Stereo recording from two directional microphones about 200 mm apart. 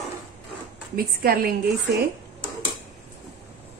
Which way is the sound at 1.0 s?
50° right (ahead or behind).